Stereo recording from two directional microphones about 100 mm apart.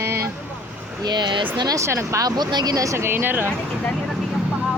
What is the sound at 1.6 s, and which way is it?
Speech, 35° right (ahead or behind).